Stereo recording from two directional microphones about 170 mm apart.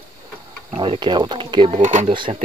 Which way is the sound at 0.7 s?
30° right (ahead or behind).